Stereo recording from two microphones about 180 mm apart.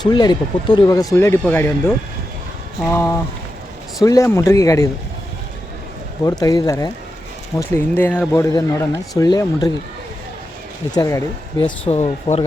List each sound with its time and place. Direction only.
0.0 s speech: 25° left (ahead or behind)
2.8 s speech: 15° left (ahead or behind)
6.2 s speech: 20° left (ahead or behind)
10.9 s speech: 20° left (ahead or behind)
11.6 s speech: 35° left (ahead or behind)